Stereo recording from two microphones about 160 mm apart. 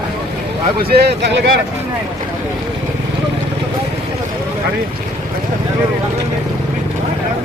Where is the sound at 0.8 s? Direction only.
85° right.